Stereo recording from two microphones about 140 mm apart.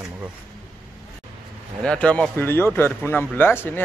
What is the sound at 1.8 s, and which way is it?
Speech, 5° left (ahead or behind).